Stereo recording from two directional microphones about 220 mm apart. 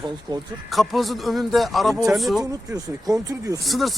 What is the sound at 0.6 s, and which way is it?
Speech, centre (ahead or behind).